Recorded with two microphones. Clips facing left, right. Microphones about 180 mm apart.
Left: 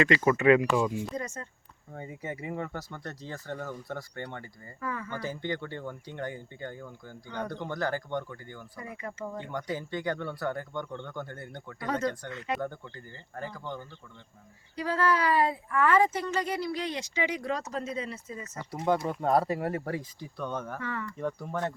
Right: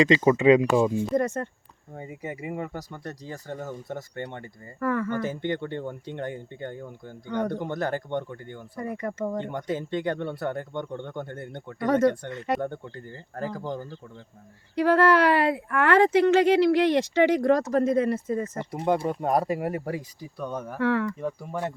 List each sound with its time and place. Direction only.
0.0 s speech: 20° right (ahead or behind)
4.8 s speech: 60° right (ahead or behind)
5.2 s speech: 20° right (ahead or behind)
7.3 s speech: 50° right (ahead or behind)
7.6 s speech: 25° right (ahead or behind)
8.7 s speech: 45° right (ahead or behind)
9.5 s speech: 25° right (ahead or behind)
11.8 s speech: 55° right (ahead or behind)
12.5 s speech: 25° right (ahead or behind)
13.5 s speech: 35° right (ahead or behind)
14.8 s speech: 65° right (ahead or behind)
18.6 s speech: 20° right (ahead or behind)
20.7 s speech: 70° right (ahead or behind)
21.2 s speech: 10° right (ahead or behind)